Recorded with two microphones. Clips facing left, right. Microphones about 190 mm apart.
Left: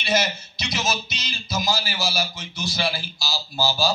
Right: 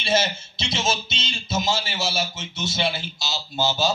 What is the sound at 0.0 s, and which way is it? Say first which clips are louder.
A man's voice: right 1 dB; 25° right (ahead or behind).